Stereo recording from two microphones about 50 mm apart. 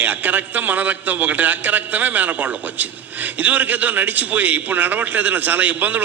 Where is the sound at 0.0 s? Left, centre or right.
Right.